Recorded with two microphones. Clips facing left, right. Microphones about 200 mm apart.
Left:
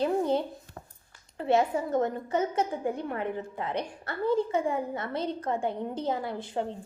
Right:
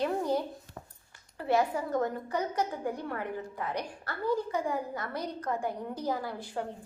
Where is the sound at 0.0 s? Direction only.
25° left (ahead or behind).